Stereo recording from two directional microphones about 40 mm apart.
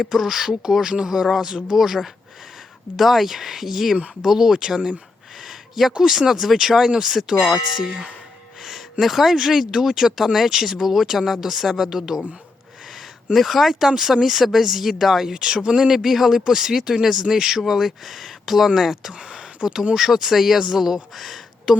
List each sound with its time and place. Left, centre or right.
0.1 s speech: centre
3.9 s speech: right
4.3 s speech: centre
5.4 s a sound: centre
6.0 s speech: centre
8.6 s speech: centre
13.3 s speech: centre
15.3 s speech: centre
19.1 s speech: right
20.0 s speech: centre
21.7 s speech: centre